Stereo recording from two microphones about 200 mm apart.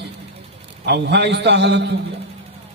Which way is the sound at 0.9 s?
55° right (ahead or behind).